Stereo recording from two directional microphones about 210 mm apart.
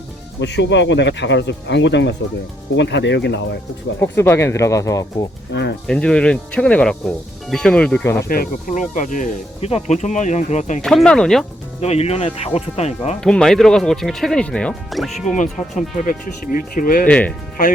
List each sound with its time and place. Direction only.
0.3 s speech: 55° left (ahead or behind)
4.0 s speech: 10° left (ahead or behind)
5.5 s speech: 55° left (ahead or behind)
5.9 s speech: 5° left (ahead or behind)
8.3 s speech: 40° left (ahead or behind)
10.8 s speech: centre (ahead or behind)
11.8 s speech: 30° left (ahead or behind)
13.2 s speech: 5° left (ahead or behind)
15.2 s speech: 35° left (ahead or behind)
17.1 s speech: 5° left (ahead or behind)